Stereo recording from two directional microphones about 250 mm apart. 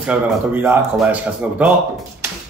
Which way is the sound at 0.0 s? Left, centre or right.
Centre.